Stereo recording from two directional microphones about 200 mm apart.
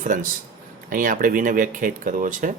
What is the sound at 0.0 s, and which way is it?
Speech, 40° right (ahead or behind).